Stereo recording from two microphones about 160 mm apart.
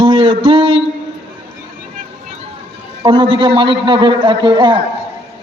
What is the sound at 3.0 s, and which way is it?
A man's voice, 35° right (ahead or behind).